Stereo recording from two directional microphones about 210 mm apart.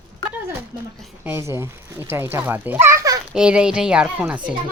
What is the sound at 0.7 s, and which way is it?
A child's voice, 15° right (ahead or behind).